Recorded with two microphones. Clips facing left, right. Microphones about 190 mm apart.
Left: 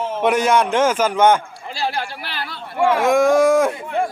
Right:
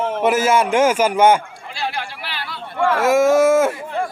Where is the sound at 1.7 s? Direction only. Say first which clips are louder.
Left 2 dB; 40° left (ahead or behind).